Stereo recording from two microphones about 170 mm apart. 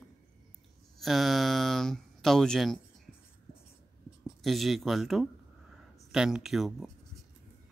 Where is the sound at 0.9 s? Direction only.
Centre (ahead or behind).